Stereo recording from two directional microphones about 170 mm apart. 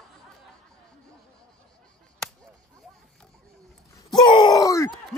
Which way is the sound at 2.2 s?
5° left (ahead or behind).